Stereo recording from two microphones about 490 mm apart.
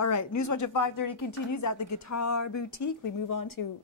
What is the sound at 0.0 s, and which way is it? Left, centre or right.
A woman's voice, left.